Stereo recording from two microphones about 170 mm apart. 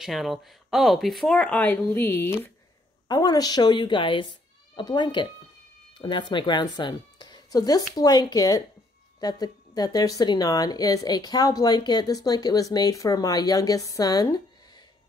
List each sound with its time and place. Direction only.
0.0 s speech: centre (ahead or behind); by 14.9 s 25° left (ahead or behind)